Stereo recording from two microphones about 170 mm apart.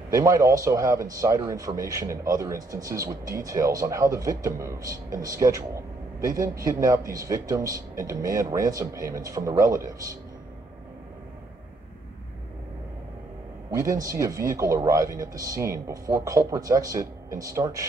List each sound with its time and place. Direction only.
0.1 s speech: 20° right (ahead or behind)
13.7 s speech: 15° right (ahead or behind)